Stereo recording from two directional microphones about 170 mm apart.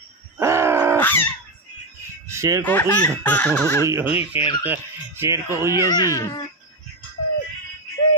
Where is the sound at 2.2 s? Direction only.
15° right (ahead or behind).